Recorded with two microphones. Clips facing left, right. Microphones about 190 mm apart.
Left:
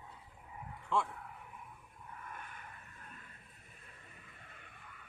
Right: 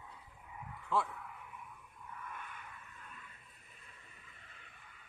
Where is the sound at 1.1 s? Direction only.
40° left (ahead or behind).